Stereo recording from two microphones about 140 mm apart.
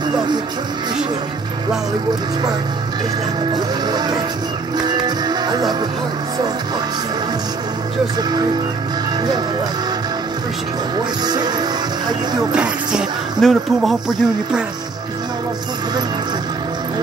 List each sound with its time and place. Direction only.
3.5 s music: 30° right (ahead or behind)
11.2 s music: 30° right (ahead or behind)
12.5 s speech: centre (ahead or behind)